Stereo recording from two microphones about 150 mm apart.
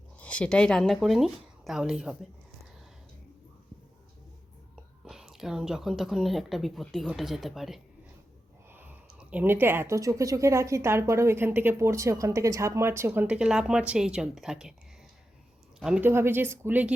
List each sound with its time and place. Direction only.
0.2 s speech: 10° left (ahead or behind)
5.0 s a woman's voice: 5° right (ahead or behind)
8.7 s speech: 15° right (ahead or behind)
15.8 s speech: 10° right (ahead or behind)